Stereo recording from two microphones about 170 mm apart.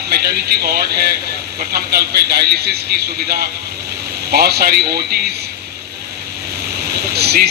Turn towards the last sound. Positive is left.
turn(degrees=-70)  # may be behind; listen again after turning